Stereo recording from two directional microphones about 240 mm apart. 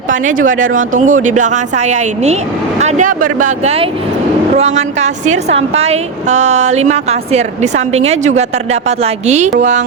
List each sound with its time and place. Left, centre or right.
0.1 s a woman's voice: right